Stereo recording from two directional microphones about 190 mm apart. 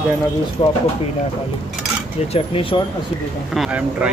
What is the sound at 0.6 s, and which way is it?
Speech, 30° left (ahead or behind).